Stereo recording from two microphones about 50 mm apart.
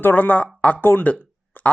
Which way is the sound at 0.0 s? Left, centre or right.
Left.